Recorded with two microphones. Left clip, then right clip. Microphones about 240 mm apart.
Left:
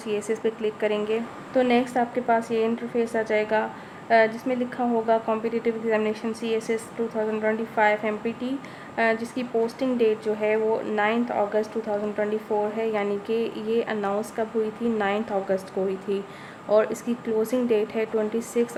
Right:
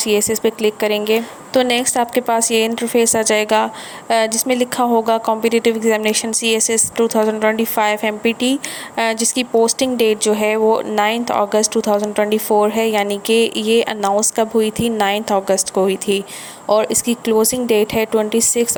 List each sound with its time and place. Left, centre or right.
0.3 s a woman's voice: right